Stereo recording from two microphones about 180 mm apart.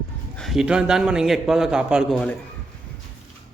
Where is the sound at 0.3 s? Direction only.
Centre (ahead or behind).